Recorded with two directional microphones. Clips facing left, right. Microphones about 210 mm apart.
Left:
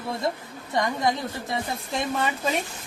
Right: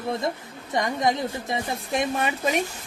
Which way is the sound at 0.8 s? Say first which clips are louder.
Right 1 dB; 20° right (ahead or behind).